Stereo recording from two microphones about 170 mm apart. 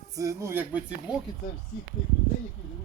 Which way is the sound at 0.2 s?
20° right (ahead or behind).